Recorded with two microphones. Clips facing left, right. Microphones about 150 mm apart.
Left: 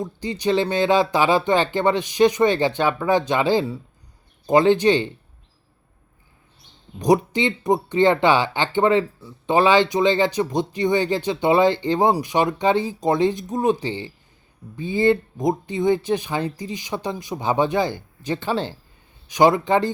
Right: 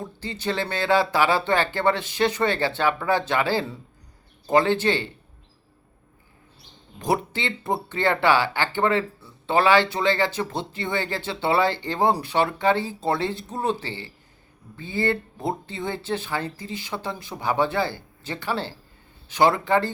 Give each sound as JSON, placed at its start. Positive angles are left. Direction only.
{"t": 0.0, "sound": "speech", "side_deg": 15}
{"t": 7.0, "sound": "speech", "side_deg": 15}